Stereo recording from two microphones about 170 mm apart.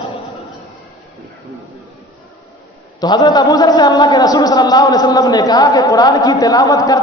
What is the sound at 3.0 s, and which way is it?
A man's voice, 25° left (ahead or behind).